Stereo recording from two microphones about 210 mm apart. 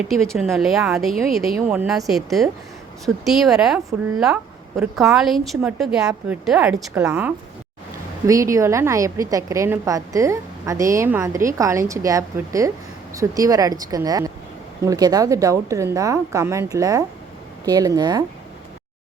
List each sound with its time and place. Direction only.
0.1 s a woman's voice: centre (ahead or behind)
4.8 s a woman's voice: centre (ahead or behind); by 18.3 s 20° right (ahead or behind)